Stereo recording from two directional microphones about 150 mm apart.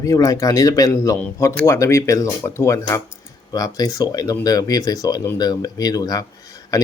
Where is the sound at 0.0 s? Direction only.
20° left (ahead or behind).